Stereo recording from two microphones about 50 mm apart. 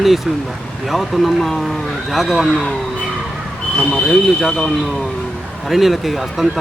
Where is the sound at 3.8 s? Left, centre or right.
Centre.